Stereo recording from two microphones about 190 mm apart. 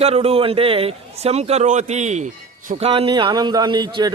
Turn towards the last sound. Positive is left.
turn(degrees=-25)  # may be behind; listen again after turning